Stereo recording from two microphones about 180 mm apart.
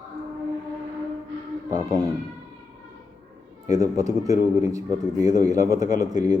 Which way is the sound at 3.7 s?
20° right (ahead or behind).